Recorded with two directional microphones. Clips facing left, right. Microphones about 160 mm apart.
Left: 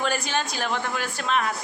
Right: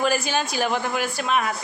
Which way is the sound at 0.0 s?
5° right (ahead or behind).